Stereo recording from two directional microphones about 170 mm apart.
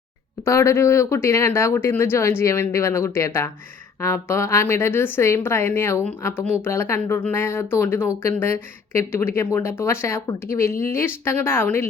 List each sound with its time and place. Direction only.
0.4 s a woman's voice: 15° left (ahead or behind)